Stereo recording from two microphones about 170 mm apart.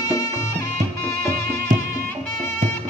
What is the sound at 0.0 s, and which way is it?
Music, 20° left (ahead or behind).